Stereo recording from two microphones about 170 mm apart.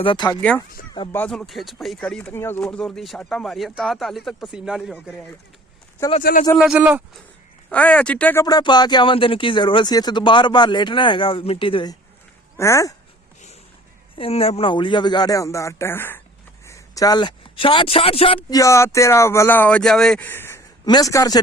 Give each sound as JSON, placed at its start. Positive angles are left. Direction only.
{"t": 0.0, "sound": "speech", "side_deg": 30}
{"t": 1.1, "sound": "speech", "side_deg": 5}
{"t": 6.1, "sound": "speech", "side_deg": 50}
{"t": 6.6, "sound": "speech", "side_deg": -5}
{"t": 7.7, "sound": "speech", "side_deg": 10}
{"t": 8.4, "sound": "speech", "side_deg": 25}
{"t": 12.5, "sound": "speech", "side_deg": 15}
{"t": 14.2, "sound": "speech", "side_deg": 35}
{"t": 18.6, "sound": "speech", "side_deg": 15}